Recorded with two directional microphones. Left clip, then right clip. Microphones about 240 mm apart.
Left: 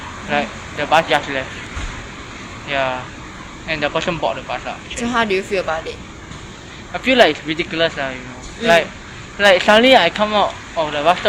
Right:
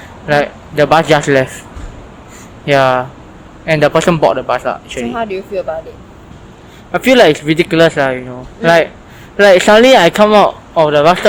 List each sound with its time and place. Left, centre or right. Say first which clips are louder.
0.3 s speech: right 8 dB; right
2.6 s speech: right 10 dB; right
5.1 s a woman's voice: left 2 dB; centre
6.9 s speech: right 6 dB; right